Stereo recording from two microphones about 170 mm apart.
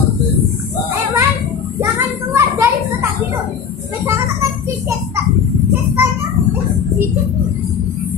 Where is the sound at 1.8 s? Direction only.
15° right (ahead or behind).